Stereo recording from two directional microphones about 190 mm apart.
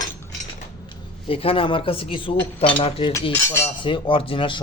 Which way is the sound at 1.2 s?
30° left (ahead or behind).